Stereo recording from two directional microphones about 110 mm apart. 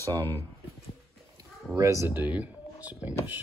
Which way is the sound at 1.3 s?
30° right (ahead or behind).